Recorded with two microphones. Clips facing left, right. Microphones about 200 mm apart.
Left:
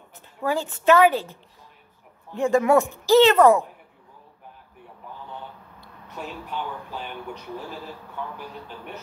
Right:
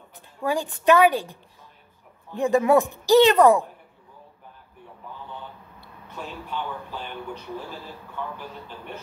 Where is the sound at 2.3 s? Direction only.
15° right (ahead or behind).